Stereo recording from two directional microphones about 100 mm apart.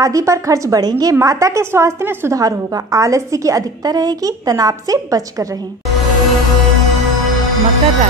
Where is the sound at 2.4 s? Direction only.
35° right (ahead or behind).